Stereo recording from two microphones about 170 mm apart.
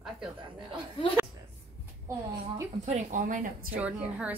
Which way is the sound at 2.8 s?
45° right (ahead or behind).